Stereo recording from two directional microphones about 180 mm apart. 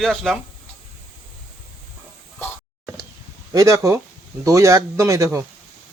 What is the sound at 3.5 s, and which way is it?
Speech, 20° right (ahead or behind).